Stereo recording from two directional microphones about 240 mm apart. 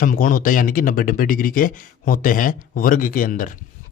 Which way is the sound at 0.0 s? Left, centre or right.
Left.